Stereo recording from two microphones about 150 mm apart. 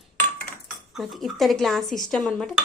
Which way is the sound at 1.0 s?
Centre (ahead or behind).